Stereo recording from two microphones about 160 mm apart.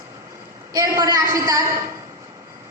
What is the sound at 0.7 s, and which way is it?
A woman's voice, 20° right (ahead or behind).